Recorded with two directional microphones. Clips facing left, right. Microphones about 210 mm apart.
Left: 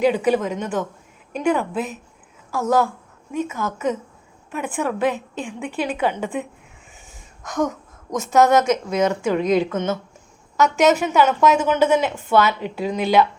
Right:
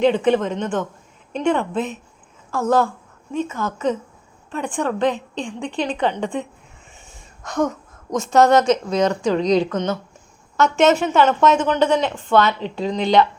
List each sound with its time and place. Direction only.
0.0 s a woman's voice: 5° left (ahead or behind)
3.4 s a woman's voice: 20° left (ahead or behind)
4.5 s a woman's voice: 5° left (ahead or behind)
7.1 s a sound: centre (ahead or behind)
8.3 s a woman's voice: 5° left (ahead or behind)